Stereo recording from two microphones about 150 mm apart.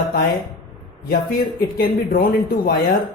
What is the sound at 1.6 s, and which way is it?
Speech, 80° left.